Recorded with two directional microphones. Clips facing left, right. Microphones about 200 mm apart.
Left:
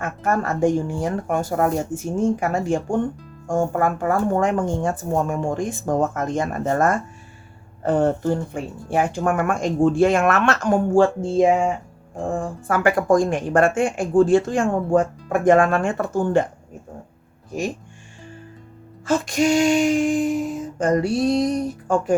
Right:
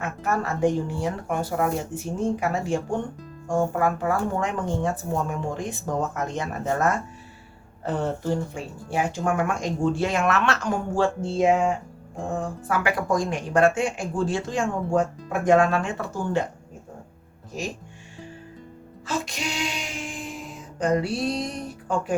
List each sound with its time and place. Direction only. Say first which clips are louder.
0.0 s speech: left 4 dB; 50° left (ahead or behind)
12.6 s speech: left 7 dB; 50° left (ahead or behind)
19.0 s speech: left 11 dB; 50° left (ahead or behind)